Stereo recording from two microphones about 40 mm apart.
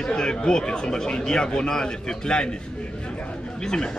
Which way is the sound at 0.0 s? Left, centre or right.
Centre.